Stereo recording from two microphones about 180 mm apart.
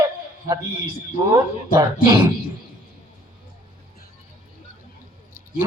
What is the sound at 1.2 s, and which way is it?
A man's voice, 15° right (ahead or behind).